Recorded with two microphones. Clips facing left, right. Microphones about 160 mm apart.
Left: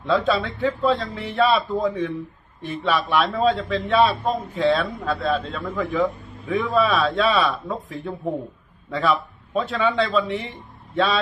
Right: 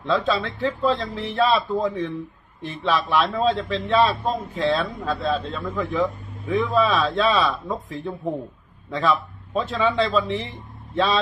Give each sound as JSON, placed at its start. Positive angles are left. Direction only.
{"t": 0.0, "sound": "a man's voice", "side_deg": 10}